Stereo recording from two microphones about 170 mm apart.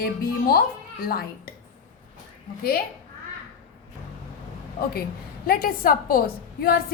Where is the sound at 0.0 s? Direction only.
60° left (ahead or behind).